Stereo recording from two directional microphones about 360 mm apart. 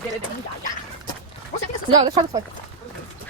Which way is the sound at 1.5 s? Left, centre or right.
Centre.